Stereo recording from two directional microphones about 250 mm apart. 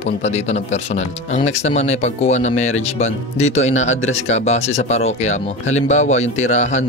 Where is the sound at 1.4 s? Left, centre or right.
Left.